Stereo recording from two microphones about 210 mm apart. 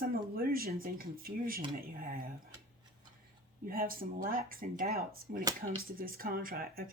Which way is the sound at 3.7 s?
40° right (ahead or behind).